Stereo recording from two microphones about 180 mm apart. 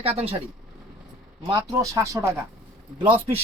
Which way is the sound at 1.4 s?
20° right (ahead or behind).